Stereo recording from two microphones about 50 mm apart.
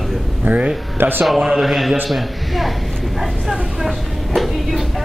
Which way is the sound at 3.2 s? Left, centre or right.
Centre.